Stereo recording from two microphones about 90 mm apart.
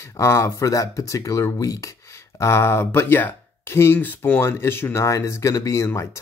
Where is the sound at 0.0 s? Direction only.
30° left (ahead or behind).